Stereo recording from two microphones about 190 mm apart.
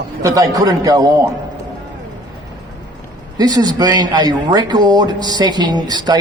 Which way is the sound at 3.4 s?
20° right (ahead or behind).